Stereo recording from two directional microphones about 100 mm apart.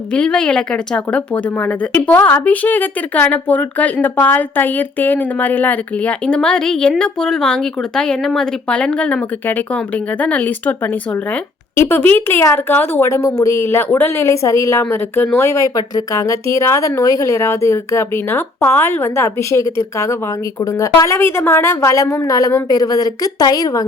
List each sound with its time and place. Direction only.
0.1 s speech: 10° left (ahead or behind)
11.8 s speech: 20° left (ahead or behind)
12.4 s a woman's voice: 30° left (ahead or behind)
12.7 s a woman's voice: 20° left (ahead or behind); by 23.8 s 40° left (ahead or behind)